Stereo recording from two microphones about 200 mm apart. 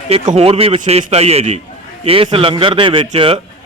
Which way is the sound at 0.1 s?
30° right (ahead or behind).